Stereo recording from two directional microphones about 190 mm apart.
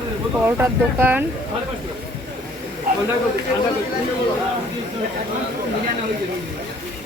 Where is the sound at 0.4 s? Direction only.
10° right (ahead or behind).